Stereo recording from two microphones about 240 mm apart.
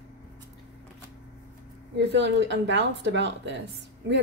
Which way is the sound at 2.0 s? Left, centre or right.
Right.